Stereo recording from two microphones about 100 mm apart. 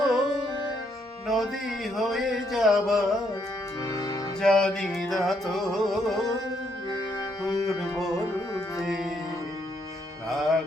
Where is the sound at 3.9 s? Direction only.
40° left (ahead or behind).